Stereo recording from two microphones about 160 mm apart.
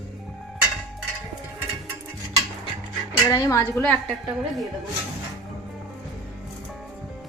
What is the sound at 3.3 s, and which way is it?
Speech, 20° left (ahead or behind).